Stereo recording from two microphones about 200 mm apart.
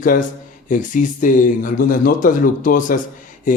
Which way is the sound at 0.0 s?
40° left (ahead or behind).